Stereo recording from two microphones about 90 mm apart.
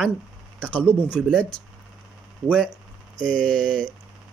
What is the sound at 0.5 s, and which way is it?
Speech, 15° left (ahead or behind).